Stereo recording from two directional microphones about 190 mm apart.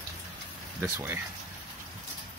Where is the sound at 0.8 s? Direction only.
10° right (ahead or behind).